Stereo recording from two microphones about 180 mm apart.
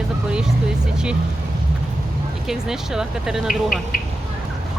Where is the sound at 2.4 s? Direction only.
5° right (ahead or behind).